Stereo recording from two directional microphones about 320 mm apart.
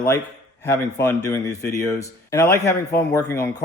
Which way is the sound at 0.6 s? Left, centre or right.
Centre.